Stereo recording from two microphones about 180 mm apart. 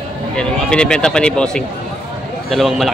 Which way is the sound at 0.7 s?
5° left (ahead or behind).